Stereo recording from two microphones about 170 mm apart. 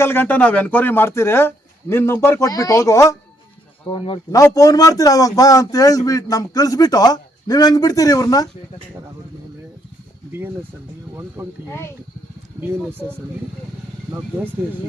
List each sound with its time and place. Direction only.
0.0 s a man's voice: 15° left (ahead or behind)
3.9 s a man's voice: 30° left (ahead or behind)
11.1 s speech: 15° right (ahead or behind)
14.4 s speech: 10° right (ahead or behind)